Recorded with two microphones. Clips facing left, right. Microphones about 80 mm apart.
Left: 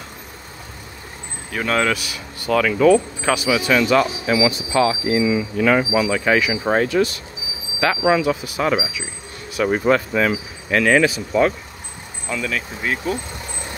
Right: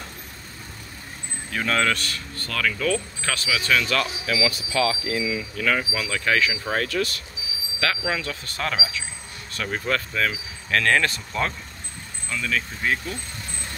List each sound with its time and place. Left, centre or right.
1.5 s speech: centre